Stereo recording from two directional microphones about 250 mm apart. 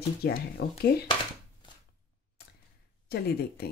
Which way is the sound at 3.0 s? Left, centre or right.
Left.